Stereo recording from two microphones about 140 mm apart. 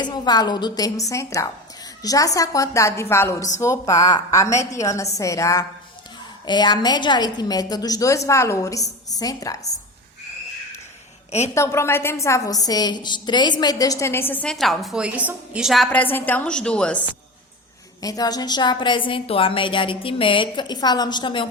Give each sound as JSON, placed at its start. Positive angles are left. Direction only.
{"t": 0.0, "sound": "a woman's voice", "side_deg": 30}
{"t": 11.3, "sound": "a woman's voice", "side_deg": 50}
{"t": 11.5, "sound": "a woman's voice", "side_deg": 20}
{"t": 14.5, "sound": "a woman's voice", "side_deg": 0}
{"t": 15.9, "sound": "a woman's voice", "side_deg": 15}
{"t": 18.0, "sound": "a woman's voice", "side_deg": 25}